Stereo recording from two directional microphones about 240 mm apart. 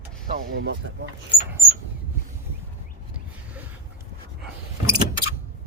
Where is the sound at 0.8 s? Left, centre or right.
Right.